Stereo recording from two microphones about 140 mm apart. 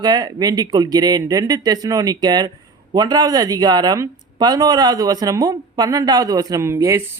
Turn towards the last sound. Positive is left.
turn(degrees=-20)  # may be behind; listen again after turning